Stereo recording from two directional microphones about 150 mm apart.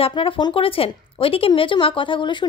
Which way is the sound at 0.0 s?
35° left (ahead or behind).